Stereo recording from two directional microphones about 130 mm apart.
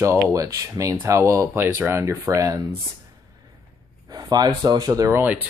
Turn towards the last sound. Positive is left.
turn(degrees=-15)  # may be behind; listen again after turning